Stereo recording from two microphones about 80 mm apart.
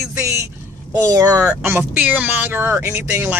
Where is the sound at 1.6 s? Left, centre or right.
Right.